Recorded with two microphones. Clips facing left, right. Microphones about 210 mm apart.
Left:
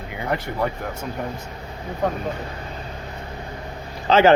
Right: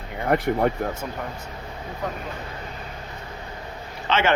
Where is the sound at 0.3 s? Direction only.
55° right (ahead or behind).